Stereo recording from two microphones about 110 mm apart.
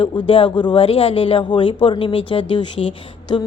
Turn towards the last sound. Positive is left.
turn(degrees=45)  # may be behind; listen again after turning